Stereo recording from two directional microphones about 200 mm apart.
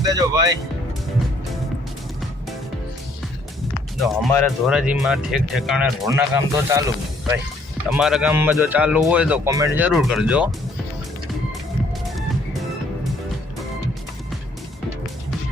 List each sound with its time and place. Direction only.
0.1 s speech: 20° right (ahead or behind)
4.0 s speech: centre (ahead or behind)
6.0 s speech: 15° right (ahead or behind)
7.9 s speech: centre (ahead or behind)